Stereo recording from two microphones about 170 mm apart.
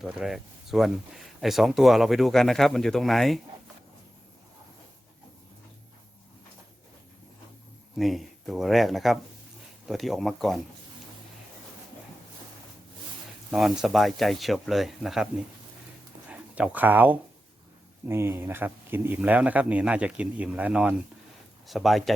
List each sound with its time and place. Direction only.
0.0 s speech: centre (ahead or behind)
7.9 s speech: centre (ahead or behind)
13.5 s speech: centre (ahead or behind)
16.3 s speech: 10° right (ahead or behind)